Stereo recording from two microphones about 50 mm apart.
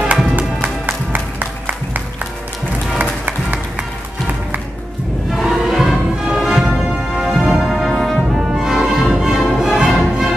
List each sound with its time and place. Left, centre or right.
1.1 s music: right
5.3 s music: centre